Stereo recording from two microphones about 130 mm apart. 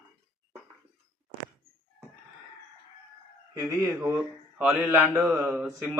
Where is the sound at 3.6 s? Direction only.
25° right (ahead or behind).